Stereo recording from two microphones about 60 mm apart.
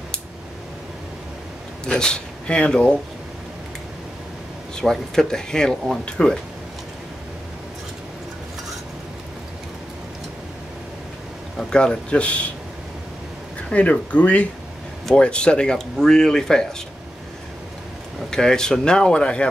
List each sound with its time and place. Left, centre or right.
1.9 s speech: centre
4.7 s speech: centre
11.5 s speech: centre
13.7 s speech: left
18.3 s speech: centre